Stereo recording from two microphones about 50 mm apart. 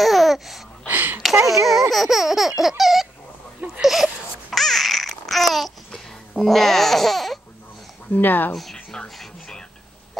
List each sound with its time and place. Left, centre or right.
0.0 s babbling: centre
0.8 s a sound: right
1.7 s laughter: centre
2.8 s dog: centre
3.8 s babbling: centre
8.1 s speech: left
9.1 s music: centre